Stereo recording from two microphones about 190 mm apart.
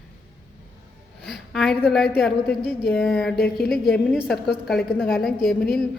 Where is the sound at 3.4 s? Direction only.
55° left (ahead or behind).